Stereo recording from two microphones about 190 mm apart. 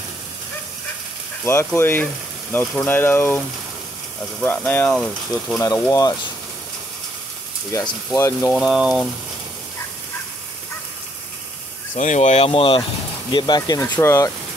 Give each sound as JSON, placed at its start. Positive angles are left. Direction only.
{"t": 1.4, "sound": "speech", "side_deg": 15}
{"t": 5.6, "sound": "speech", "side_deg": 20}
{"t": 8.1, "sound": "speech", "side_deg": 15}
{"t": 8.5, "sound": "speech", "side_deg": 0}
{"t": 12.0, "sound": "speech", "side_deg": 40}